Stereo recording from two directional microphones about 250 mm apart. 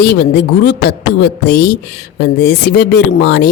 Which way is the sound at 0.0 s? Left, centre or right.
Left.